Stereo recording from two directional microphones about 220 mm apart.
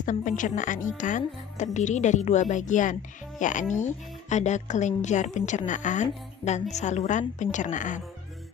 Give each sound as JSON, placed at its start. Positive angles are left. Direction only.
{"t": 0.0, "sound": "a woman's voice", "side_deg": 35}